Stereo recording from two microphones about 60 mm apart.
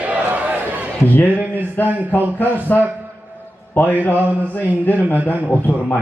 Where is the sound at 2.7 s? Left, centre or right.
Left.